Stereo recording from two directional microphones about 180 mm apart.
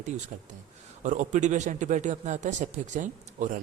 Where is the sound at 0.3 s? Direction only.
45° right (ahead or behind).